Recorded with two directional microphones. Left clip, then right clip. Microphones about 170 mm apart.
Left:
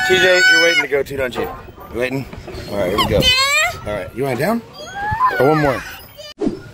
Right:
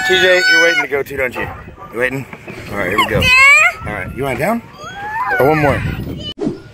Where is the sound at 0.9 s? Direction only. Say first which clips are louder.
Right 1 dB; 25° right (ahead or behind).